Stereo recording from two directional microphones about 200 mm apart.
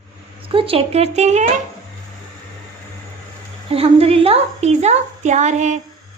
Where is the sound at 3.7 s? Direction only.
30° right (ahead or behind).